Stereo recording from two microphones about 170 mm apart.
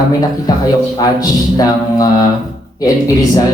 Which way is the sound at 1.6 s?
20° left (ahead or behind).